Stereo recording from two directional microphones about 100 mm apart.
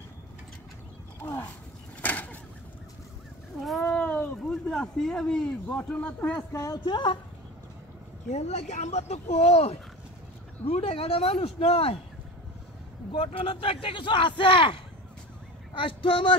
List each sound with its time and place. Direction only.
1.2 s a sound: 15° left (ahead or behind)
2.0 s vehicle: 15° left (ahead or behind)
3.9 s a sound: 15° left (ahead or behind)
6.5 s speech: 30° left (ahead or behind)
6.8 s a man's voice: 55° left (ahead or behind)
8.4 s speech: 90° left
13.1 s a man's voice: 65° left (ahead or behind)